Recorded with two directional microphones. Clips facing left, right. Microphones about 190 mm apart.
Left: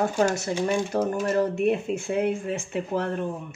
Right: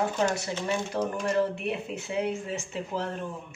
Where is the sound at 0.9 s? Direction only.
45° left (ahead or behind).